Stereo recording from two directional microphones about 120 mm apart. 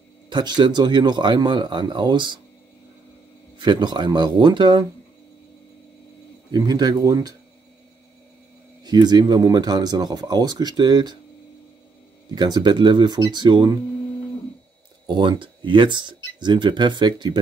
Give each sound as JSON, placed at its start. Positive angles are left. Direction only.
{"t": 0.3, "sound": "speech", "side_deg": -40}
{"t": 3.5, "sound": "speech", "side_deg": -40}
{"t": 6.5, "sound": "speech", "side_deg": -35}
{"t": 8.8, "sound": "speech", "side_deg": -35}
{"t": 12.4, "sound": "speech", "side_deg": -35}
{"t": 15.0, "sound": "speech", "side_deg": -45}